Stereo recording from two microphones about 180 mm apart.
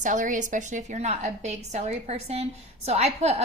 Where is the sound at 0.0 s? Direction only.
45° right (ahead or behind).